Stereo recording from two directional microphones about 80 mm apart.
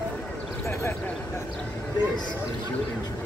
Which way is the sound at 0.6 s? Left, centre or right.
Left.